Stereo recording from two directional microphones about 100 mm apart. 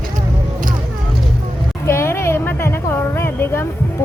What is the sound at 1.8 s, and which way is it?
A woman's voice, 25° left (ahead or behind).